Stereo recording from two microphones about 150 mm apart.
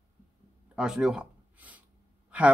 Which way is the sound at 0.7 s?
5° right (ahead or behind).